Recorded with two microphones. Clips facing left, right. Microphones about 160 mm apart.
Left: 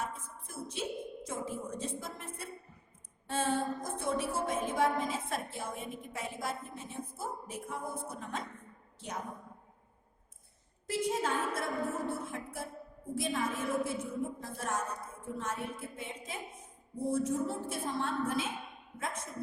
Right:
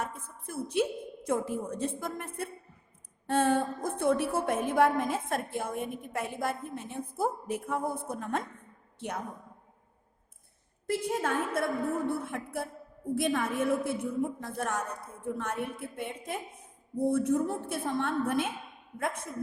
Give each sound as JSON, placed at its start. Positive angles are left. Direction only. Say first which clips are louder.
{"t": 0.0, "sound": "a woman's voice", "louder": "right 3 dB", "side_deg": -60}
{"t": 10.8, "sound": "a woman's voice", "louder": "right 2 dB", "side_deg": -55}